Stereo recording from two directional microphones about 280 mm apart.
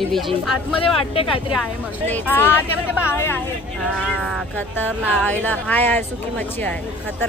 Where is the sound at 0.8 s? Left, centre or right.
Left.